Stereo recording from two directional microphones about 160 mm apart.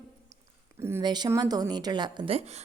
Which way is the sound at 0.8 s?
15° right (ahead or behind).